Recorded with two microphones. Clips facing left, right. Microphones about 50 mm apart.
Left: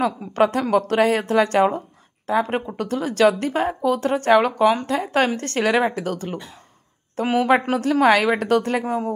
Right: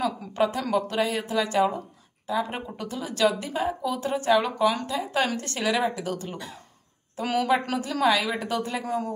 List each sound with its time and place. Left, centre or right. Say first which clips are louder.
0.4 s speech: left 6 dB; left